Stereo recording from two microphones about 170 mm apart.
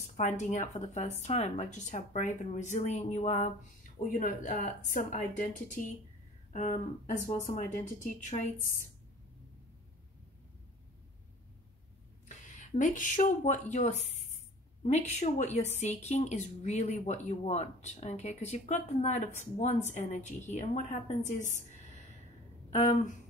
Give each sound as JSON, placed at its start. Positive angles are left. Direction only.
{"t": 0.0, "sound": "a woman's voice", "side_deg": 45}
{"t": 6.5, "sound": "a woman's voice", "side_deg": 50}
{"t": 12.4, "sound": "a woman's voice", "side_deg": 45}